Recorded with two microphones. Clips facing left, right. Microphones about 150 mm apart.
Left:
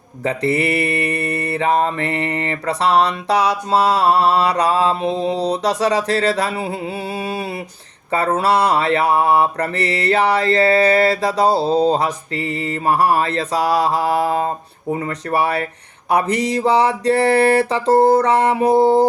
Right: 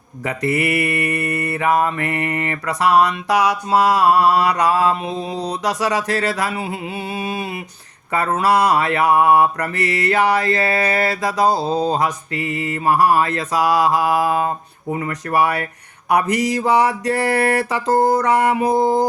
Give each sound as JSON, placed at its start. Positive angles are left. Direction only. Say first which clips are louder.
{"t": 0.3, "sound": "mantra", "louder": "left 2 dB", "side_deg": 30}